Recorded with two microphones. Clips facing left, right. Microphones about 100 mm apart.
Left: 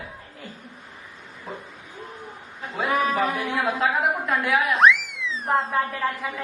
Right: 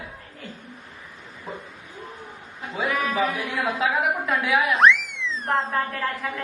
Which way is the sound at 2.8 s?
35° left (ahead or behind).